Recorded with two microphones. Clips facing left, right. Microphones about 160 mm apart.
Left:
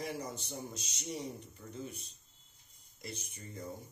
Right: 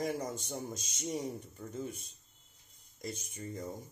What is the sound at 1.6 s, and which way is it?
Speech, 50° right (ahead or behind).